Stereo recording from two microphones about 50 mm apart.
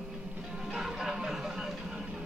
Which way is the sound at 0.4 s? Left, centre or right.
Centre.